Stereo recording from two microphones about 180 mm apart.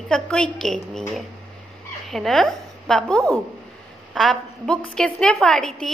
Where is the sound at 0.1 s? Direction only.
5° left (ahead or behind).